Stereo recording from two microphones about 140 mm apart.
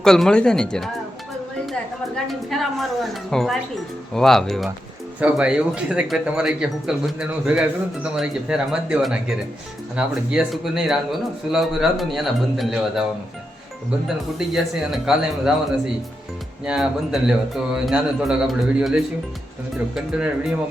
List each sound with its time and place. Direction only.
0.0 s a man's voice: 5° left (ahead or behind)
14.3 s a man's voice: centre (ahead or behind)
16.6 s a man's voice: 5° right (ahead or behind)